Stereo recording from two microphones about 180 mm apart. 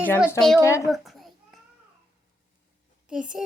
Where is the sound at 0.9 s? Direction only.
Centre (ahead or behind).